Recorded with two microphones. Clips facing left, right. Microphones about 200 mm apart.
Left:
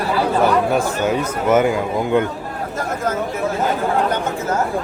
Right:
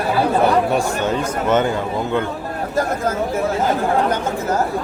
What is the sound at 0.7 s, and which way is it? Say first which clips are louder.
Speech: left 1 dB; 5° left (ahead or behind).